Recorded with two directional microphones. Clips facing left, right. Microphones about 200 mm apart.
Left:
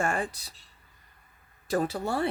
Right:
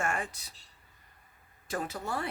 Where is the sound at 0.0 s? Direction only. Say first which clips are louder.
Left 4 dB; 35° left (ahead or behind).